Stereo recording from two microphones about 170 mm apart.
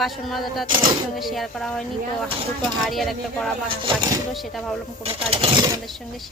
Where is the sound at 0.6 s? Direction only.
30° right (ahead or behind).